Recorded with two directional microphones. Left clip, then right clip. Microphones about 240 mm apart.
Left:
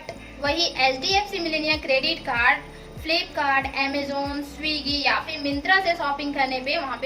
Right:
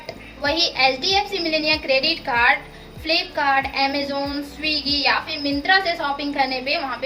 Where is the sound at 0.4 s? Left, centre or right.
Centre.